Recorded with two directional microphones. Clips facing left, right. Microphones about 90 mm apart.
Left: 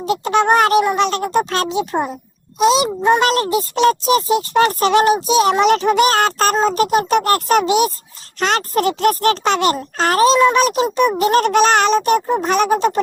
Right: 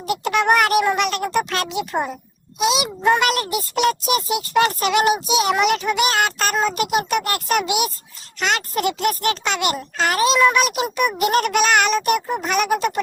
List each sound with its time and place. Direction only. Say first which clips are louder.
0.0 s speech: left 4 dB; 25° left (ahead or behind)